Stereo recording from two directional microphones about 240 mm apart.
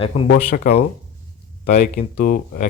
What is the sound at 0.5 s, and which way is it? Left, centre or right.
Speech, left.